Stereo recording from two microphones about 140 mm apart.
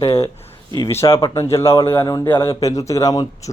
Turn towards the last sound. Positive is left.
turn(degrees=25)  # may be behind; listen again after turning